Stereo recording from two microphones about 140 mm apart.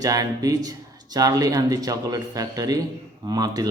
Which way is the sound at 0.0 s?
25° right (ahead or behind).